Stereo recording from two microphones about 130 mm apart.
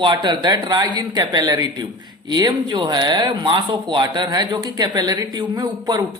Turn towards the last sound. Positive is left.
turn(degrees=-30)  # may be behind; listen again after turning